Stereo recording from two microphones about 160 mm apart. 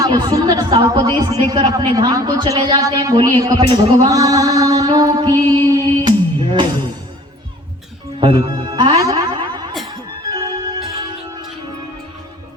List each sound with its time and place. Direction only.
0.0 s speech: 25° right (ahead or behind)
8.2 s music: 30° right (ahead or behind)